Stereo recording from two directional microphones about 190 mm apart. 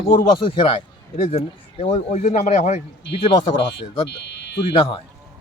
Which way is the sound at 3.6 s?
60° left (ahead or behind).